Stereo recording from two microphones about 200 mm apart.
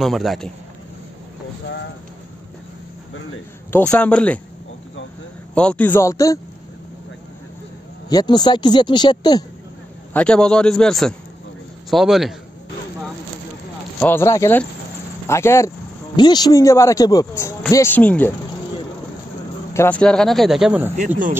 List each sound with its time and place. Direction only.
0.0 s a man's voice: centre (ahead or behind)
3.7 s speech: 10° left (ahead or behind)
5.5 s speech: 5° left (ahead or behind)
8.1 s speech: 20° left (ahead or behind)
10.1 s a man's voice: 5° left (ahead or behind)
13.9 s speech: 10° left (ahead or behind)
19.7 s a man's voice: 10° left (ahead or behind); by 20.9 s 5° right (ahead or behind)